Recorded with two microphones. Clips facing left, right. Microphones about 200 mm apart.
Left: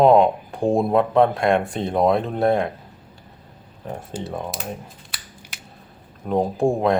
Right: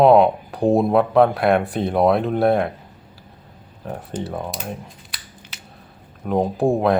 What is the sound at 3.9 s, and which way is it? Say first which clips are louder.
Speech: right 2 dB; centre (ahead or behind).